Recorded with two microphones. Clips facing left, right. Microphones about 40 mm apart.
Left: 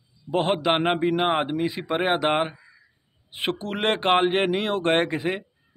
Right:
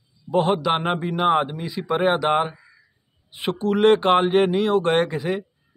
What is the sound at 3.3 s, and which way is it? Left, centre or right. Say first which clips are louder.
Speech: right 5 dB; left.